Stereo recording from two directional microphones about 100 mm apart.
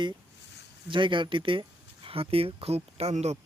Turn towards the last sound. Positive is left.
turn(degrees=-90)